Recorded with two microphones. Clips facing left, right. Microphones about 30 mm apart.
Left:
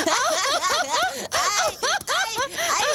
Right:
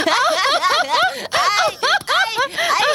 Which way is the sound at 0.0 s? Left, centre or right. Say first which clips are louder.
Right 6 dB; right.